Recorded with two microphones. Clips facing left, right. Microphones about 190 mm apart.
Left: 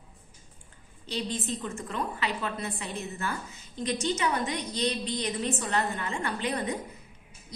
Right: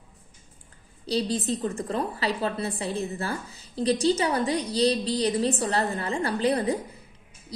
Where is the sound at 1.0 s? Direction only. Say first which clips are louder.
Right 7 dB; 35° right (ahead or behind).